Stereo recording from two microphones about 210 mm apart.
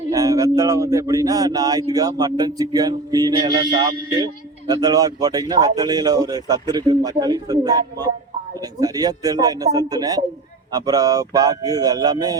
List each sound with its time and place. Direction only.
0.1 s speech: 15° right (ahead or behind)